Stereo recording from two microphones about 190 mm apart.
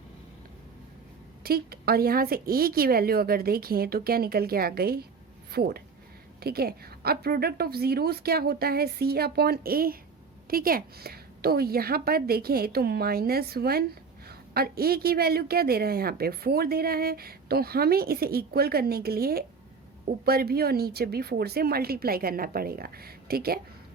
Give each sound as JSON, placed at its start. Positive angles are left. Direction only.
{"t": 1.5, "sound": "a woman's voice", "side_deg": -55}